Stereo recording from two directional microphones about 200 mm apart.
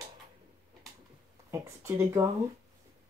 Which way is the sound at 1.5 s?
15° right (ahead or behind).